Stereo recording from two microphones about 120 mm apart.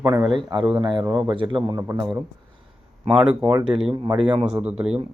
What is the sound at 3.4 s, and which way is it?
Speech, 25° right (ahead or behind).